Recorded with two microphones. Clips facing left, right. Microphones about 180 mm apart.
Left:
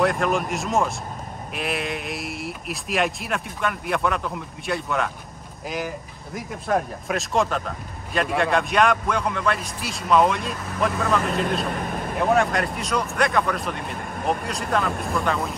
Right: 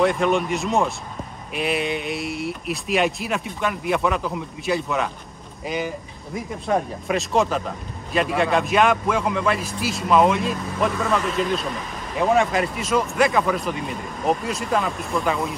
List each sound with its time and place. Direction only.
0.0 s speech: centre (ahead or behind)
11.2 s a man's voice: 55° left (ahead or behind)
11.6 s vehicle: 55° left (ahead or behind)
12.2 s speech: centre (ahead or behind)